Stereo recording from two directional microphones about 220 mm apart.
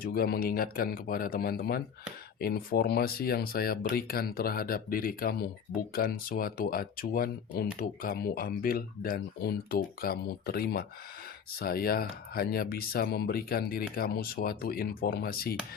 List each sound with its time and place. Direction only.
0.0 s speech: 40° left (ahead or behind)